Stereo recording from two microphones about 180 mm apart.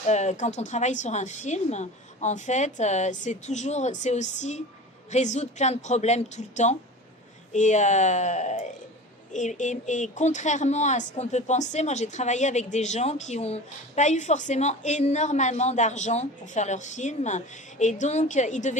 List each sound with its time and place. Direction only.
0.1 s speech: 40° left (ahead or behind)